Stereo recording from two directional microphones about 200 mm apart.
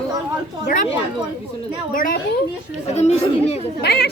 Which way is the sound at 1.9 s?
45° left (ahead or behind).